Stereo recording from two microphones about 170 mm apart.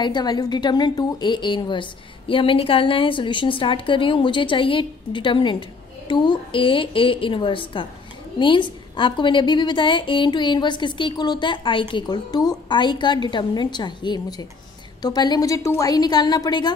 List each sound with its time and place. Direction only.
0.0 s a woman's voice: 25° left (ahead or behind)